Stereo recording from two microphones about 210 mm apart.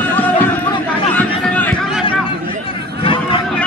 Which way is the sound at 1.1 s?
5° left (ahead or behind).